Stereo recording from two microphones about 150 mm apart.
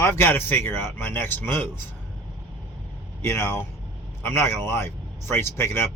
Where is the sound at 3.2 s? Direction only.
15° left (ahead or behind).